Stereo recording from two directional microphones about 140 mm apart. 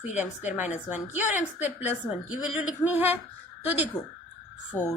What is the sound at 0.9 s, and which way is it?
A woman's voice, 15° right (ahead or behind).